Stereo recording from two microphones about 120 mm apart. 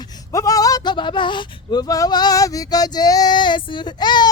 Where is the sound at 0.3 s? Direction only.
30° left (ahead or behind).